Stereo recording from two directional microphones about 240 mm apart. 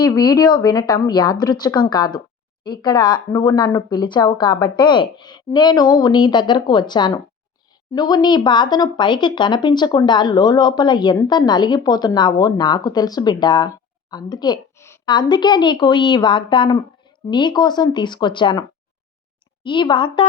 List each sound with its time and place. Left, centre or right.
0.0 s speech: centre
19.6 s speech: centre